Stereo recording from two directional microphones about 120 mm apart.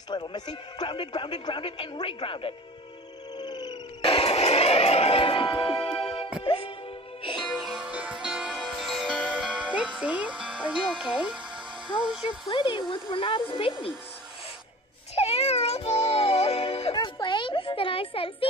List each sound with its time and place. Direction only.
0.1 s a man's voice: 40° left (ahead or behind)
3.3 s music: 35° left (ahead or behind)
7.5 s music: 5° right (ahead or behind)
12.4 s a man's voice: 45° left (ahead or behind)
15.1 s music: 55° left (ahead or behind)
16.9 s a sound: 40° left (ahead or behind)